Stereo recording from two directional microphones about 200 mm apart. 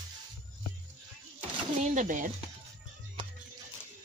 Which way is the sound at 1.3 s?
35° right (ahead or behind).